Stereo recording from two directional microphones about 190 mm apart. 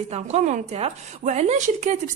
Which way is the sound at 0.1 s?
35° right (ahead or behind).